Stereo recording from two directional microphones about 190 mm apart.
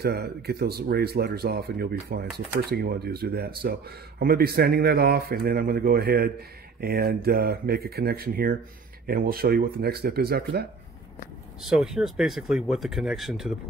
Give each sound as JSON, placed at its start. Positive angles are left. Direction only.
{"t": 0.0, "sound": "speech", "side_deg": -55}
{"t": 11.6, "sound": "speech", "side_deg": 0}